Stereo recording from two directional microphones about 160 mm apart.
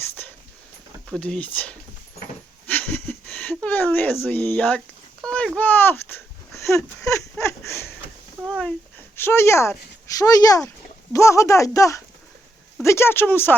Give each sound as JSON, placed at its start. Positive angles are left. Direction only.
{"t": 1.1, "sound": "speech", "side_deg": 5}
{"t": 2.6, "sound": "a sound", "side_deg": 10}
{"t": 5.5, "sound": "speech", "side_deg": 10}
{"t": 7.4, "sound": "a sound", "side_deg": 15}
{"t": 8.4, "sound": "speech", "side_deg": 0}
{"t": 9.1, "sound": "speech", "side_deg": 15}